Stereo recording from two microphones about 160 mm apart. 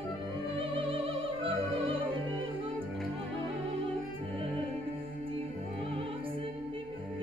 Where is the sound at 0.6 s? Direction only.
35° right (ahead or behind).